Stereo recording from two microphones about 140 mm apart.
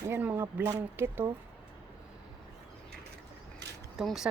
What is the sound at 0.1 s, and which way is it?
Speech, 15° right (ahead or behind).